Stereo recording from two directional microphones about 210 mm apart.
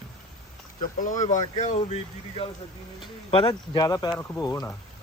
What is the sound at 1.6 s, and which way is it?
Speech, 30° left (ahead or behind).